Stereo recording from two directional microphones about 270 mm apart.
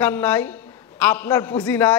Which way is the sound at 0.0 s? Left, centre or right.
Centre.